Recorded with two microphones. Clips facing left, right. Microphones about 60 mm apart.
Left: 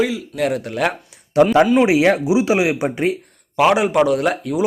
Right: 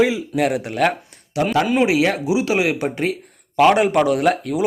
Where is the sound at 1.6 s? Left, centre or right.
Left.